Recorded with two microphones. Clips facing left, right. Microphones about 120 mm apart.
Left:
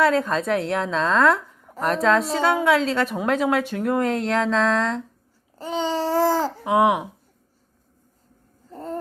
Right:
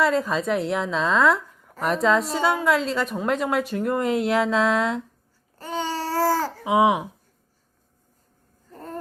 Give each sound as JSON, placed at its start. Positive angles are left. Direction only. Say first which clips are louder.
{"t": 0.0, "sound": "speech", "louder": "left 2 dB", "side_deg": 0}
{"t": 5.5, "sound": "babbling", "louder": "left 4 dB", "side_deg": 20}
{"t": 6.7, "sound": "speech", "louder": "even", "side_deg": 0}